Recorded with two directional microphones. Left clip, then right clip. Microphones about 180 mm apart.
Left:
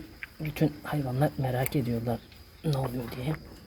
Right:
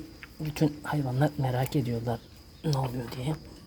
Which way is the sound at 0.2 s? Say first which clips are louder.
Left 5 dB; 20° right (ahead or behind).